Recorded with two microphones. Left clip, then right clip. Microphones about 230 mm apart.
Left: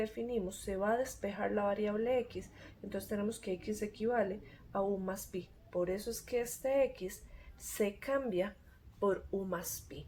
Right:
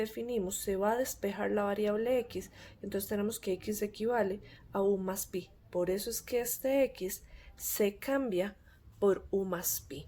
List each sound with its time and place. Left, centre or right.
0.0 s speech: right